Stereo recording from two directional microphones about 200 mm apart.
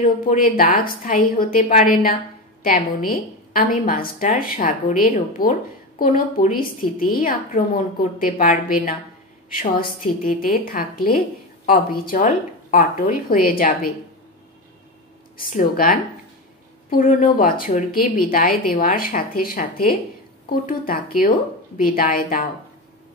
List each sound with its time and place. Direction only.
0.0 s a woman's voice: 45° left (ahead or behind)
15.5 s a woman's voice: 45° left (ahead or behind)